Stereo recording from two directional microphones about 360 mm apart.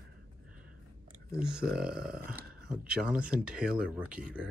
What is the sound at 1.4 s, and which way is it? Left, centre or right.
Speech, centre.